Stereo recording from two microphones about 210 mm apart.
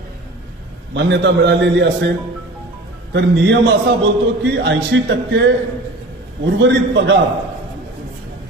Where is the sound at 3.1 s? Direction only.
60° right (ahead or behind).